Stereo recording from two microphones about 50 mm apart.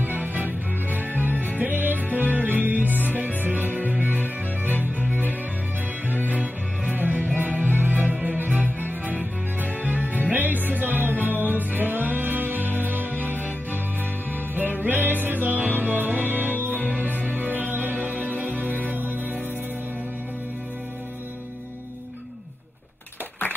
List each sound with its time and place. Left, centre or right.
0.0 s music: right